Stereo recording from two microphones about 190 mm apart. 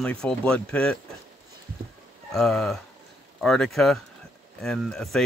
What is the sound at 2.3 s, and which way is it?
Speech, centre (ahead or behind).